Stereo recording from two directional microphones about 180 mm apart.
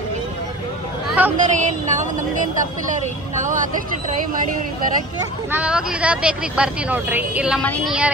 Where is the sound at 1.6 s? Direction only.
40° right (ahead or behind).